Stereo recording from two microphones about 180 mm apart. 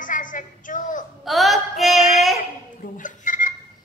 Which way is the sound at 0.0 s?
45° left (ahead or behind).